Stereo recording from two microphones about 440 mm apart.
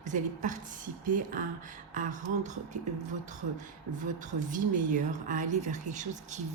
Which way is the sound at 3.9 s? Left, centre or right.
Centre.